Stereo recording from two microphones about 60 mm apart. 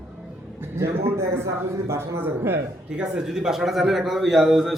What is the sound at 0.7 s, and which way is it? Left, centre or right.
A man's voice, right.